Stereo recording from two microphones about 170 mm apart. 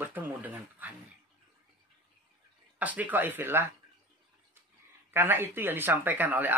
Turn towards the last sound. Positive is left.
turn(degrees=-10)  # may be behind; listen again after turning